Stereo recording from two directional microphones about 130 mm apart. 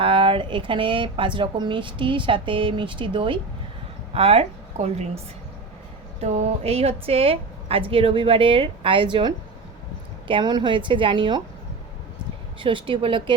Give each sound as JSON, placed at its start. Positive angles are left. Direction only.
{"t": 0.0, "sound": "speech", "side_deg": -40}
{"t": 4.1, "sound": "a woman's voice", "side_deg": -50}
{"t": 12.5, "sound": "speech", "side_deg": -40}